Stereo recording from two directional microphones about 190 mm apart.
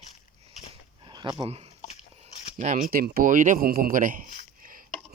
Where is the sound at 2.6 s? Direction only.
40° right (ahead or behind).